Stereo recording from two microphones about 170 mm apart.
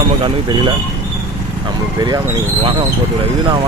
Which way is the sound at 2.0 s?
25° right (ahead or behind).